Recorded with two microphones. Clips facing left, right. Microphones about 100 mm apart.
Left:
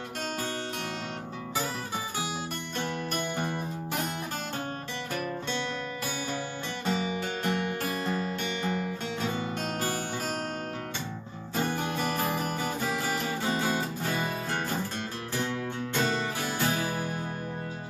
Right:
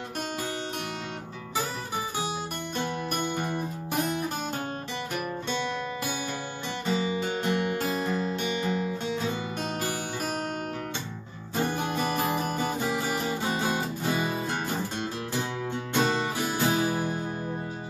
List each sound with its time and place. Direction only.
2.8 s music: 15° right (ahead or behind)
6.9 s music: 20° right (ahead or behind)
11.7 s music: 15° right (ahead or behind)
15.9 s music: 15° right (ahead or behind)